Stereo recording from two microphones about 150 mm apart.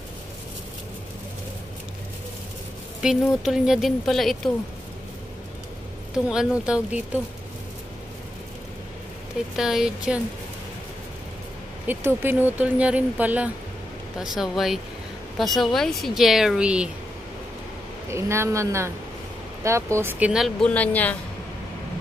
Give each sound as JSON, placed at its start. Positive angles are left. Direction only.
{"t": 3.0, "sound": "speech", "side_deg": -5}
{"t": 6.1, "sound": "speech", "side_deg": -5}
{"t": 9.6, "sound": "speech", "side_deg": -5}
{"t": 11.9, "sound": "speech", "side_deg": -15}
{"t": 18.1, "sound": "a woman's voice", "side_deg": -20}